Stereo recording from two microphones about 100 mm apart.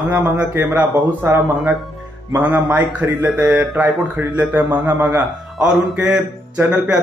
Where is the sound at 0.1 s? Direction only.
20° right (ahead or behind).